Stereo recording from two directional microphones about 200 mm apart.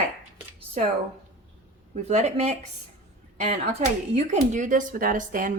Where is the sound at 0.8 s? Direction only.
35° right (ahead or behind).